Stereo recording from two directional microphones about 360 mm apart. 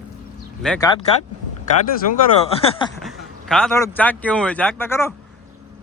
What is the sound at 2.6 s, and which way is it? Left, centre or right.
Speech, centre.